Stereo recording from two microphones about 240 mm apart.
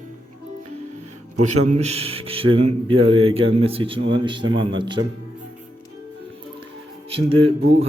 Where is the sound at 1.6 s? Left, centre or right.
Right.